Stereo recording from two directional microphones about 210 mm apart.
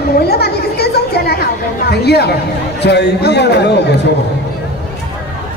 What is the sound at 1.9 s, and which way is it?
A man's voice, 50° left (ahead or behind).